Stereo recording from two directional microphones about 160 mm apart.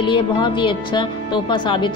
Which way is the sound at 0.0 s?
30° left (ahead or behind).